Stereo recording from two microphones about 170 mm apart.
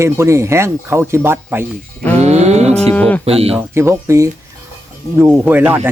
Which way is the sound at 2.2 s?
40° right (ahead or behind).